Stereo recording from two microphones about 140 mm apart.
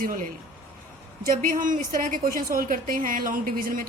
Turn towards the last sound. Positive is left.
turn(degrees=-85)